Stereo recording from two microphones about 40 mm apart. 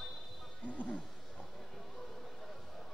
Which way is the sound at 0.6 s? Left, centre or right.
Left.